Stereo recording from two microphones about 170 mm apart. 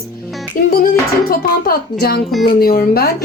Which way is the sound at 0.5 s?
55° left (ahead or behind).